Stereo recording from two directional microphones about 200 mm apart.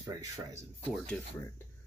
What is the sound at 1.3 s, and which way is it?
Speech, 15° left (ahead or behind).